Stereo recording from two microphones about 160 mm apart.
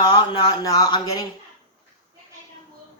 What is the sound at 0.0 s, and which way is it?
Speech, 25° left (ahead or behind).